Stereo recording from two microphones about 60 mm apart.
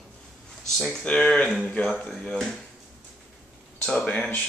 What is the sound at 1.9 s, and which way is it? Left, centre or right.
Speech, centre.